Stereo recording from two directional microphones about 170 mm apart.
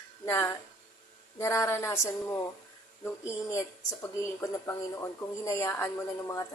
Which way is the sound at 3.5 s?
15° left (ahead or behind).